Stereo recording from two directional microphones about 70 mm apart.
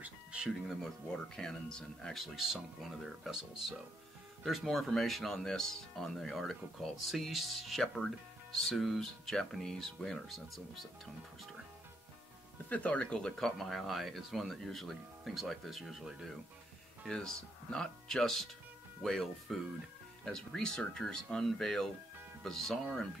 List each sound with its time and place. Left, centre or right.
0.0 s music: centre
1.0 s speech: centre
2.1 s speech: centre
12.6 s speech: left
13.6 s speech: centre
17.1 s speech: centre